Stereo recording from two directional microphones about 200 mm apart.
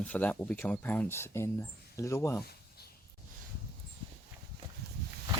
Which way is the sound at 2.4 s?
50° left (ahead or behind).